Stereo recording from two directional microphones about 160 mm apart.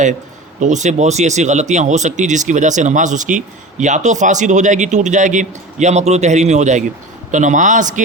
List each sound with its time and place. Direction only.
0.6 s speech: 50° right (ahead or behind)